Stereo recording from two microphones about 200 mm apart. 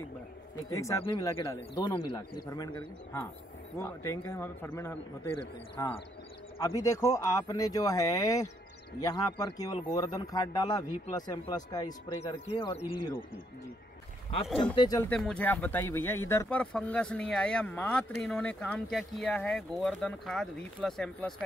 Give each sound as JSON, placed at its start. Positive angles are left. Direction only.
{"t": 0.7, "sound": "speech", "side_deg": 15}
{"t": 6.6, "sound": "speech", "side_deg": 15}
{"t": 14.5, "sound": "speech", "side_deg": 5}
{"t": 14.8, "sound": "speech", "side_deg": 20}
{"t": 15.0, "sound": "speech", "side_deg": 5}